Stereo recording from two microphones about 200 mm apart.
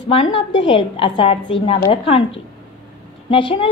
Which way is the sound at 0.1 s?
25° left (ahead or behind).